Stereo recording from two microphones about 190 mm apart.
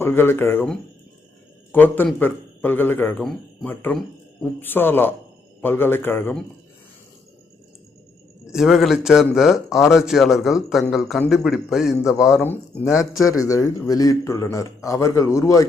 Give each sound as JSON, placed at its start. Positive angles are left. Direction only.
{"t": 0.0, "sound": "a man's voice", "side_deg": 10}
{"t": 8.5, "sound": "speech", "side_deg": 0}
{"t": 12.4, "sound": "a man's voice", "side_deg": 10}